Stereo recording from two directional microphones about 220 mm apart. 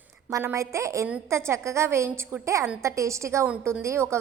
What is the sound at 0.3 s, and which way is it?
A woman's voice, 15° right (ahead or behind).